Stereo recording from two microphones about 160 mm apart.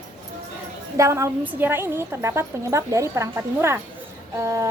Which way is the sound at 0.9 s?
20° right (ahead or behind).